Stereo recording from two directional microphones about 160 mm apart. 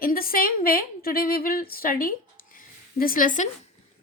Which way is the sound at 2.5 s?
60° left (ahead or behind).